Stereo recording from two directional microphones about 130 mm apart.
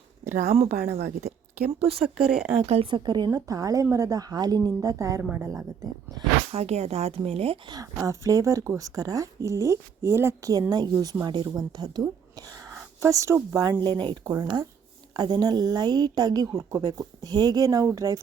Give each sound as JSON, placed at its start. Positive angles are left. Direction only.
{"t": 0.5, "sound": "speech", "side_deg": -55}
{"t": 2.0, "sound": "speech", "side_deg": 0}
{"t": 2.6, "sound": "a woman's voice", "side_deg": -45}
{"t": 6.5, "sound": "speech", "side_deg": -55}
{"t": 7.7, "sound": "a woman's voice", "side_deg": -25}